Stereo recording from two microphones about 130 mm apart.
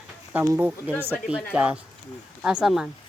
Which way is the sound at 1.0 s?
10° right (ahead or behind).